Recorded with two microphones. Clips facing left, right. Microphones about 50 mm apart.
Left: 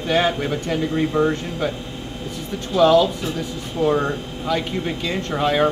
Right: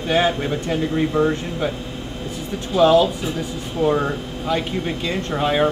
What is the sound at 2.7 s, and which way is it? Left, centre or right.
Speech, centre.